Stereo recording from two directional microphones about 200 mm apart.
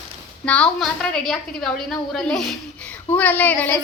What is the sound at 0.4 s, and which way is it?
A woman's voice, 5° left (ahead or behind).